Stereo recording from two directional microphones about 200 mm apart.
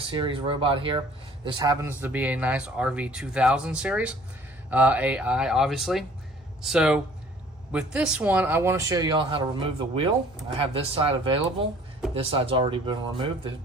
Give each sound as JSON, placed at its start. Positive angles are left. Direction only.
{"t": 0.0, "sound": "speech", "side_deg": -25}